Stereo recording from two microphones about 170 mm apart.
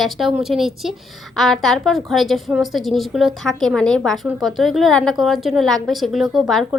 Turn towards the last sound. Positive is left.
turn(degrees=0)  # may be behind; listen again after turning